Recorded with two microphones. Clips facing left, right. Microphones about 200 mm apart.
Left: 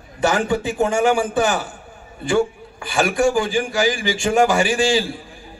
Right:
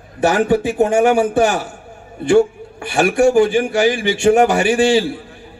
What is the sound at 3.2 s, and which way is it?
A man's voice, 60° right (ahead or behind).